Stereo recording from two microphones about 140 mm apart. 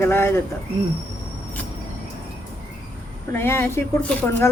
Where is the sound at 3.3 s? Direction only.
15° left (ahead or behind).